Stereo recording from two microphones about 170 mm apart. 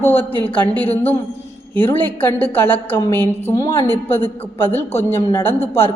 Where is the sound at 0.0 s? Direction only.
10° left (ahead or behind).